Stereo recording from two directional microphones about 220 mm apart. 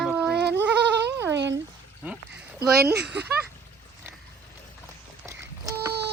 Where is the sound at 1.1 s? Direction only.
15° right (ahead or behind).